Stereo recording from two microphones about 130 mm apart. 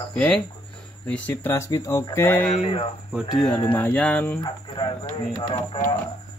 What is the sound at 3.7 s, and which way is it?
Speech, 10° left (ahead or behind).